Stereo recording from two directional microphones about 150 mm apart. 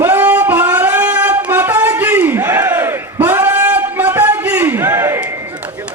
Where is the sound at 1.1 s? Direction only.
10° right (ahead or behind).